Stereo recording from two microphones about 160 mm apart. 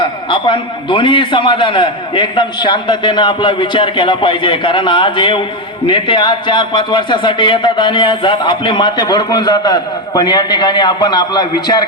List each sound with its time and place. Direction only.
0.0 s a man's voice: 30° left (ahead or behind)